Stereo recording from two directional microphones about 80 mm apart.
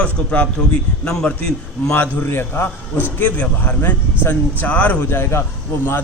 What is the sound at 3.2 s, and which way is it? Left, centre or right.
A man's voice, centre.